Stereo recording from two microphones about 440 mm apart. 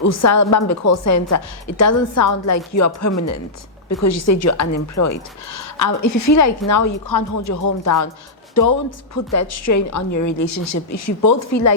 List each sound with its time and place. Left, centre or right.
0.0 s a woman's voice: left
9.1 s a woman's voice: left